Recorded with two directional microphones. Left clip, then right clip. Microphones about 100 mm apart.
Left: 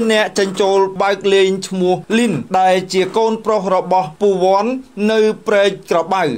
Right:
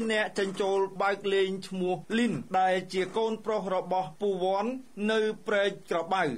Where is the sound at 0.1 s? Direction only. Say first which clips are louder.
Left 12 dB; 25° left (ahead or behind).